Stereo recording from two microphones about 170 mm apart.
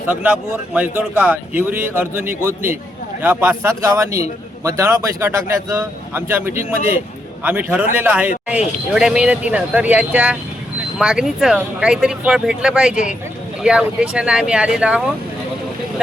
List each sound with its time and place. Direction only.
0.1 s a man's voice: 5° right (ahead or behind)